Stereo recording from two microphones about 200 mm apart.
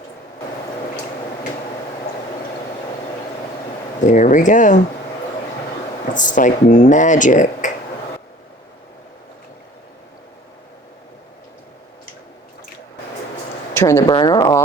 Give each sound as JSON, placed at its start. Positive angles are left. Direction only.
{"t": 4.0, "sound": "speech", "side_deg": 40}
{"t": 6.1, "sound": "speech", "side_deg": 40}
{"t": 13.7, "sound": "speech", "side_deg": 15}